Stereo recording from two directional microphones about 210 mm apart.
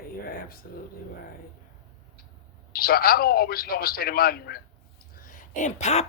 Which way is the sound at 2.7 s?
45° left (ahead or behind).